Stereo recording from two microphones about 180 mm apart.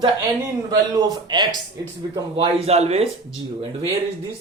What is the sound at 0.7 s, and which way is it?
Speech, 20° right (ahead or behind).